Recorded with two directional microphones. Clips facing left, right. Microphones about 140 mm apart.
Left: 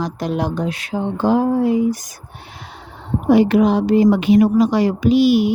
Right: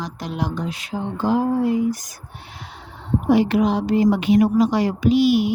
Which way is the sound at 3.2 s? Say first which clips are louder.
Left 4 dB; 55° left (ahead or behind).